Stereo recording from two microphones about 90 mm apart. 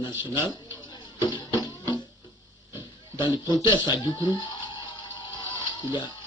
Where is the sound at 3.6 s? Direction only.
55° left (ahead or behind).